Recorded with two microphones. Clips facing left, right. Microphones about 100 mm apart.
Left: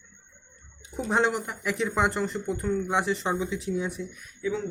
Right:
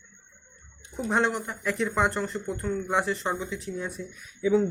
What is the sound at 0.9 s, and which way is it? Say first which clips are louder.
Speech: left 1 dB; 5° left (ahead or behind).